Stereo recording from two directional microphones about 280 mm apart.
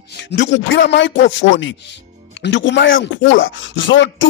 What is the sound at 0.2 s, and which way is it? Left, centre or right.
Speech, left.